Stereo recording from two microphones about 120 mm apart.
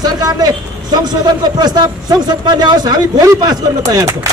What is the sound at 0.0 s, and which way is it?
A man's voice, 35° right (ahead or behind).